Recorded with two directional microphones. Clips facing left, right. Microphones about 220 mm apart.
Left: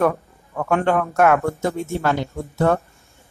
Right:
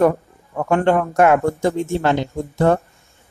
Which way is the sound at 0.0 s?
15° right (ahead or behind).